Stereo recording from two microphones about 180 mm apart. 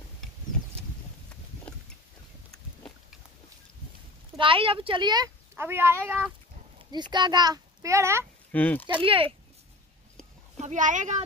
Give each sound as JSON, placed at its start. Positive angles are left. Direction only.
{"t": 4.4, "sound": "speech", "side_deg": -30}
{"t": 6.9, "sound": "speech", "side_deg": -25}
{"t": 8.5, "sound": "speech", "side_deg": 10}
{"t": 8.8, "sound": "speech", "side_deg": -30}
{"t": 10.6, "sound": "speech", "side_deg": -45}